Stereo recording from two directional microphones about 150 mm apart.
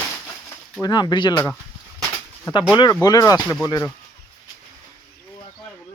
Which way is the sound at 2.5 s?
25° left (ahead or behind).